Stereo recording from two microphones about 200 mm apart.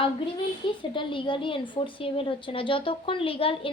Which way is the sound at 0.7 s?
25° left (ahead or behind).